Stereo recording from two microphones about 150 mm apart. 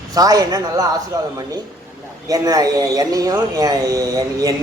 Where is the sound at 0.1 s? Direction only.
25° right (ahead or behind).